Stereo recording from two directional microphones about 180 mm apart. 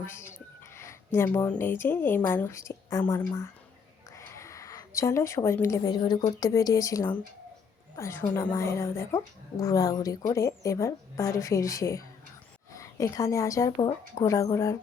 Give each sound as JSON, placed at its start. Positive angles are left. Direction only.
{"t": 0.0, "sound": "a woman's voice", "side_deg": 15}